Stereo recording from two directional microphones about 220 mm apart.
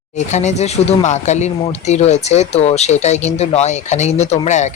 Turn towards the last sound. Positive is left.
turn(degrees=30)  # may be behind; listen again after turning